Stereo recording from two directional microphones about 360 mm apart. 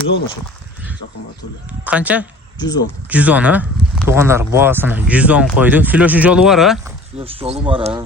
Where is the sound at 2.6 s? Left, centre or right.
Centre.